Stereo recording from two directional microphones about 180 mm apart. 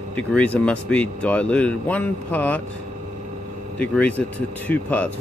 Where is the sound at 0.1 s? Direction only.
5° left (ahead or behind).